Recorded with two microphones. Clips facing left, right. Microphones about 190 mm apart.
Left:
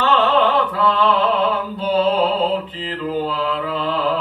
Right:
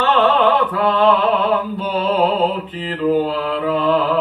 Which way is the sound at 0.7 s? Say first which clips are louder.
Right 1 dB; 55° right (ahead or behind).